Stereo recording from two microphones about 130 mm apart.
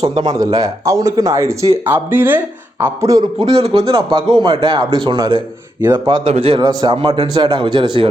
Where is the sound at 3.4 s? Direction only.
50° right (ahead or behind).